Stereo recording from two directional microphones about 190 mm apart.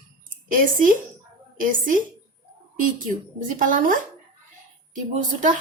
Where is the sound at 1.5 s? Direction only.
45° right (ahead or behind).